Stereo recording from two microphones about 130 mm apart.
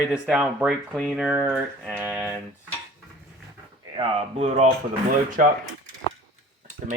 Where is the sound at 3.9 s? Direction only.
50° right (ahead or behind).